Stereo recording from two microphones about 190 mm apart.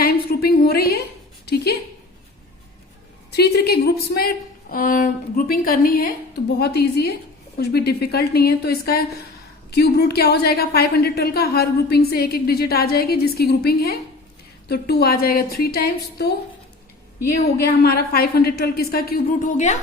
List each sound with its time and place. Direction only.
0.0 s a sound: 55° left (ahead or behind)
3.3 s a woman's voice: 60° left (ahead or behind)
17.8 s a woman's voice: 55° left (ahead or behind)